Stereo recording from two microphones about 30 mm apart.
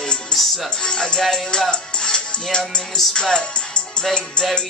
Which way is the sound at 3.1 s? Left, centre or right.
Left.